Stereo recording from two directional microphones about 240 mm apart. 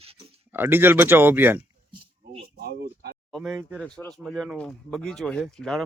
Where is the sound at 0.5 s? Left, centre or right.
Centre.